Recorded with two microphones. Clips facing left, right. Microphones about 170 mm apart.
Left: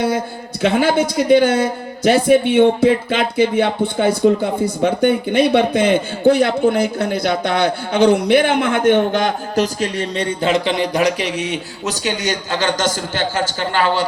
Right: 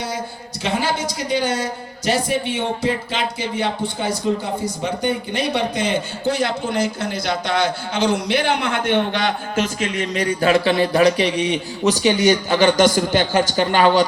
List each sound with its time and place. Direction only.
0.6 s a man's voice: 55° left (ahead or behind); by 11.9 s 10° left (ahead or behind)
12.0 s speech: 10° right (ahead or behind)